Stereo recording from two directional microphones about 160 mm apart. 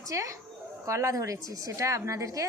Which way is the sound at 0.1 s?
20° right (ahead or behind).